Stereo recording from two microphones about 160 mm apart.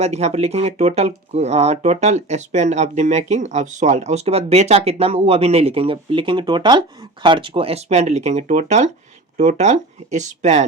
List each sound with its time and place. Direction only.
0.0 s speech: 45° right (ahead or behind)